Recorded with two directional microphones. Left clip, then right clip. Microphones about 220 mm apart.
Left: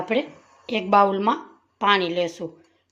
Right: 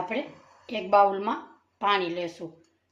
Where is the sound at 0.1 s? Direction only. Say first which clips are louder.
Left 8 dB; 40° left (ahead or behind).